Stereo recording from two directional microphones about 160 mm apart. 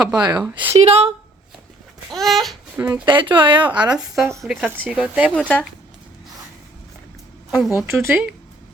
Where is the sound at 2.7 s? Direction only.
15° right (ahead or behind).